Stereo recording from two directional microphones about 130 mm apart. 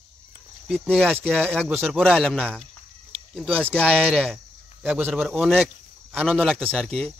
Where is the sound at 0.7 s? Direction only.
5° left (ahead or behind).